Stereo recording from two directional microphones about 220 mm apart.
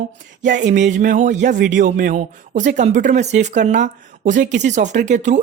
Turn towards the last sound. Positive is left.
turn(degrees=-35)  # may be behind; listen again after turning